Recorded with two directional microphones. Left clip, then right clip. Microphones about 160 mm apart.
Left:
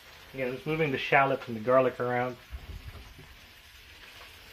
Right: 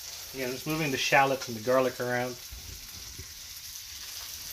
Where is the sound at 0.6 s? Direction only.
5° left (ahead or behind).